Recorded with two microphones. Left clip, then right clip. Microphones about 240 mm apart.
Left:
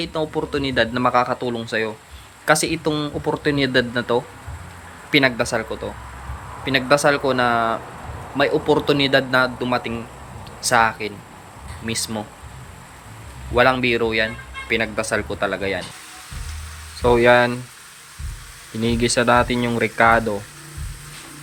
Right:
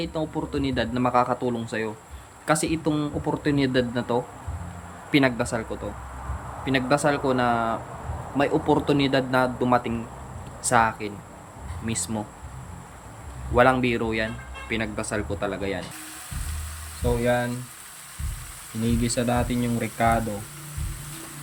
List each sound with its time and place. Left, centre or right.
0.0 s speech: centre
13.5 s speech: centre
17.0 s speech: centre
18.8 s speech: centre